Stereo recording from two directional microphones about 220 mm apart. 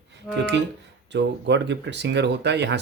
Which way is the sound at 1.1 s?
50° right (ahead or behind).